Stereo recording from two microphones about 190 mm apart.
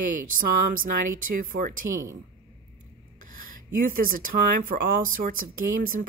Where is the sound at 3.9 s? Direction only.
50° right (ahead or behind).